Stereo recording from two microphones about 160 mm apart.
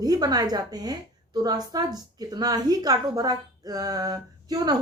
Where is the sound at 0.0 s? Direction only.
25° right (ahead or behind).